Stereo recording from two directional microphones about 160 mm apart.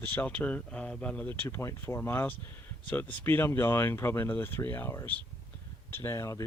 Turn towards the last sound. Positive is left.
turn(degrees=20)  # may be behind; listen again after turning